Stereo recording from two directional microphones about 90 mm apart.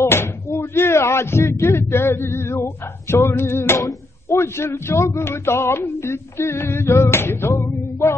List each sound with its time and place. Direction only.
0.0 s speech: 25° left (ahead or behind)